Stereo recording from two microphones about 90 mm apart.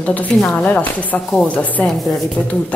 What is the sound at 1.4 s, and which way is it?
Speech, 15° left (ahead or behind).